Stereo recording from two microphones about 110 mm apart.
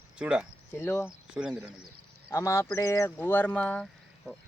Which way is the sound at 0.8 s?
25° left (ahead or behind).